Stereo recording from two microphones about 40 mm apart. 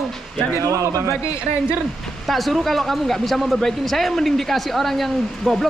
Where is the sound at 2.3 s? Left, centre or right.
Centre.